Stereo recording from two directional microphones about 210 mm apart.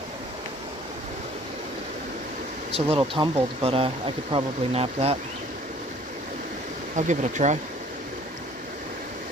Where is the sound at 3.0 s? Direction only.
25° right (ahead or behind).